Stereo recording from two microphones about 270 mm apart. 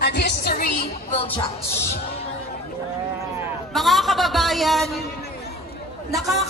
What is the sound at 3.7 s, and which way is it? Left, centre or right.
A man's voice, centre.